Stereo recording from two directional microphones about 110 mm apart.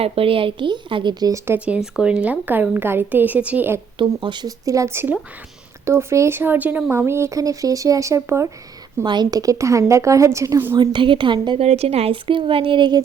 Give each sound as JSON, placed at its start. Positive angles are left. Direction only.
{"t": 0.0, "sound": "a woman's voice", "side_deg": -55}
{"t": 1.5, "sound": "a woman's voice", "side_deg": -10}
{"t": 3.9, "sound": "a woman's voice", "side_deg": -50}
{"t": 4.6, "sound": "speech", "side_deg": -30}
{"t": 9.0, "sound": "speech", "side_deg": -40}
{"t": 10.8, "sound": "a woman's voice", "side_deg": -50}
{"t": 11.6, "sound": "speech", "side_deg": -70}